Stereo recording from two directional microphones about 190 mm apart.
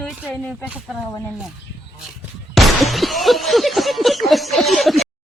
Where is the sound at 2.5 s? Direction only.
Centre (ahead or behind).